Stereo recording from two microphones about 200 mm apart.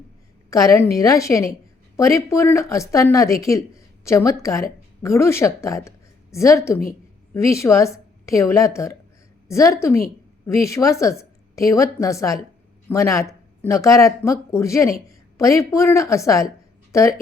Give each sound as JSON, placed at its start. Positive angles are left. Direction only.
{"t": 0.5, "sound": "speech", "side_deg": 15}